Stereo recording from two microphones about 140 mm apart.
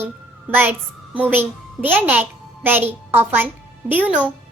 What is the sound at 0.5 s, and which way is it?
A child's voice, 15° right (ahead or behind).